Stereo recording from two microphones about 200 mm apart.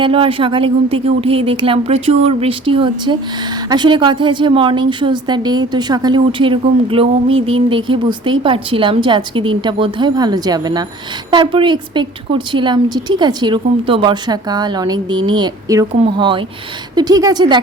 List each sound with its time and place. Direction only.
0.0 s a woman's voice: 25° right (ahead or behind)